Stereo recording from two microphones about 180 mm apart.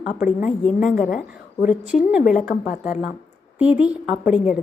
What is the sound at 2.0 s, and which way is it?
Speech, 5° right (ahead or behind).